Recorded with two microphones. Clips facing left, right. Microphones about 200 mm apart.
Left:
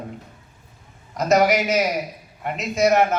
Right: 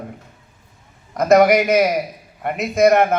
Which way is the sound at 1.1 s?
55° right (ahead or behind).